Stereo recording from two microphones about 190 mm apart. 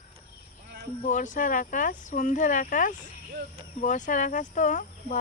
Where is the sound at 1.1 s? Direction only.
40° left (ahead or behind).